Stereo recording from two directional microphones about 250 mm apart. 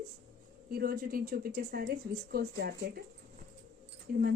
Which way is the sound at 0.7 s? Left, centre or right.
Right.